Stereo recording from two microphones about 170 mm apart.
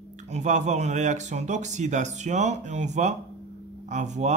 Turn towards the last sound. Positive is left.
turn(degrees=-45)  # may be behind; listen again after turning